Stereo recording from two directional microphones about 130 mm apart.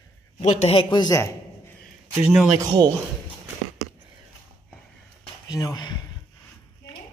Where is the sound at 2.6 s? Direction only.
30° right (ahead or behind).